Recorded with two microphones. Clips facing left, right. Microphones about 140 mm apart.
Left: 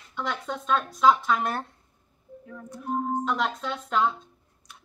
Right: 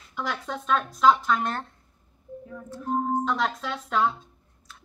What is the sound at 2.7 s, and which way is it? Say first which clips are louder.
Speech: right 2 dB; 10° left (ahead or behind).